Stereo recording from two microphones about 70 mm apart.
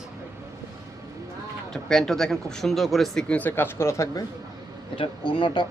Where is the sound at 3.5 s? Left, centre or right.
Left.